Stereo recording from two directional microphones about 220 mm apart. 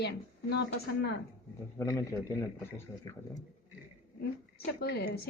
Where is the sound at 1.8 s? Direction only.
10° left (ahead or behind).